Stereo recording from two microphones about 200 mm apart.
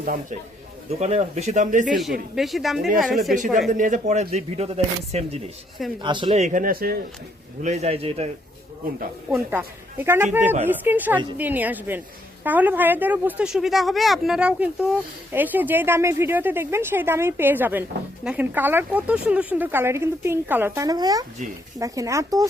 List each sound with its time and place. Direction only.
0.0 s a man's voice: 45° right (ahead or behind)
0.9 s speech: 30° right (ahead or behind)
2.3 s speech: centre (ahead or behind)
3.3 s speech: 40° right (ahead or behind)
7.6 s speech: 35° right (ahead or behind)
9.3 s a woman's voice: 10° right (ahead or behind)
10.4 s speech: 35° right (ahead or behind)
10.7 s a woman's voice: 10° right (ahead or behind)